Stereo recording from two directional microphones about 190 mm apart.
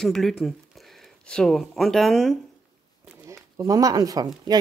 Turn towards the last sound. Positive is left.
turn(degrees=-20)  # may be behind; listen again after turning